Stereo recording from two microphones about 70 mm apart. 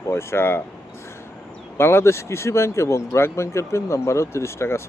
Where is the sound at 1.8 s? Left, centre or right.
Left.